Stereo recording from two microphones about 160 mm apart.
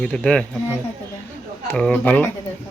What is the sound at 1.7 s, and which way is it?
Speech, 10° left (ahead or behind).